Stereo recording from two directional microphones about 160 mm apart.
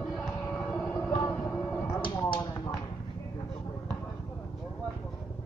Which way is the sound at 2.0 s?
30° left (ahead or behind).